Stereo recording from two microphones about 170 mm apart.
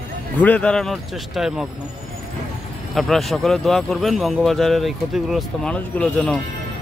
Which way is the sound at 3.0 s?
Centre (ahead or behind).